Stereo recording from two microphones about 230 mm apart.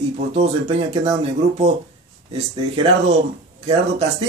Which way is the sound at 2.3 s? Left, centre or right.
Right.